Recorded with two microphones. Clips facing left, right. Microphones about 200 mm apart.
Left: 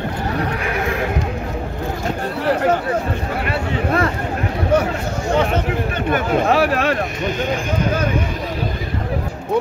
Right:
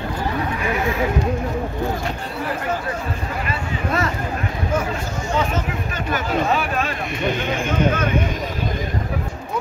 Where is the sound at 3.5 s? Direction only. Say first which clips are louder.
Left 5 dB; 55° left (ahead or behind).